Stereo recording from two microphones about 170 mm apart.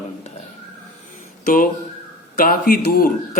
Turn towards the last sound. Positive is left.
turn(degrees=55)  # may be behind; listen again after turning